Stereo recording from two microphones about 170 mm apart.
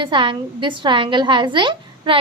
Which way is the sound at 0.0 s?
30° right (ahead or behind).